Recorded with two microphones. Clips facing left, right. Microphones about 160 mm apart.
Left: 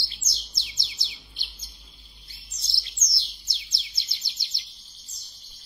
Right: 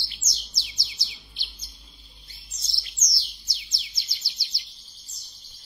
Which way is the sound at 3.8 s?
25° left (ahead or behind).